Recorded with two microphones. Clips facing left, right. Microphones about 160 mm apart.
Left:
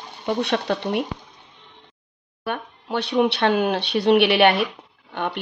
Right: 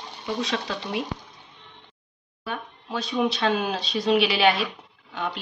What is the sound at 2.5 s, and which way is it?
Speech, 65° left (ahead or behind).